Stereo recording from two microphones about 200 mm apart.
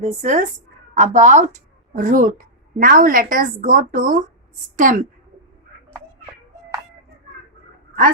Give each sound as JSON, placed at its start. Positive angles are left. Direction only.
{"t": 0.0, "sound": "a woman's voice", "side_deg": -35}